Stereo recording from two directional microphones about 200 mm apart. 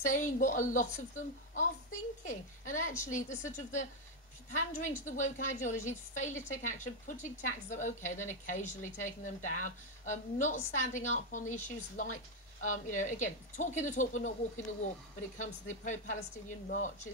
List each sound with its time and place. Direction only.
0.0 s a woman's voice: 40° left (ahead or behind)
15.3 s a woman's voice: 40° left (ahead or behind)